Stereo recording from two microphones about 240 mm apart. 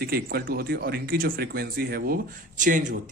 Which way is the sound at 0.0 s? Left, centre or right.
Right.